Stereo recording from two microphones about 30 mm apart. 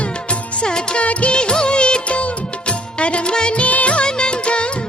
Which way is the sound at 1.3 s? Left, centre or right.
Left.